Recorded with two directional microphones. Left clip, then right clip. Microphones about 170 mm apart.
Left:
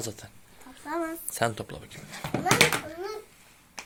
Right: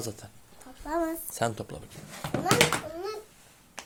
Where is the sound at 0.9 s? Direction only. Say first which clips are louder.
Right 2 dB; 30° right (ahead or behind).